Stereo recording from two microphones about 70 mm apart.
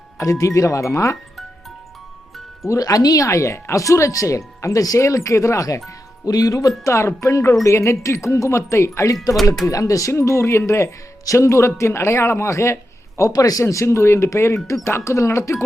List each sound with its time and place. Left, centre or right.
0.2 s speech: left
2.6 s speech: left
10.1 s speech: left
13.1 s speech: left